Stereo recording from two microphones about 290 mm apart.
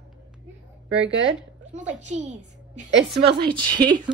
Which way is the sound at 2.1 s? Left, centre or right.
Right.